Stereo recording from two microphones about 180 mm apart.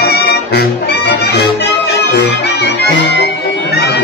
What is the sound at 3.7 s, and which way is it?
Crowd, 65° left (ahead or behind).